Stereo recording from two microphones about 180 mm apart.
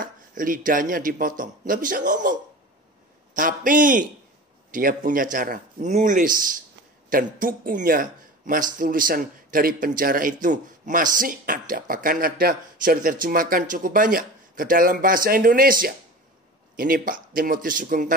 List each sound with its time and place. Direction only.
0.0 s speech: 50° right (ahead or behind)